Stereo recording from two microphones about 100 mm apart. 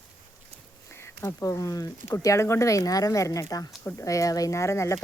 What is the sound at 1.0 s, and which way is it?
Speech, 30° left (ahead or behind).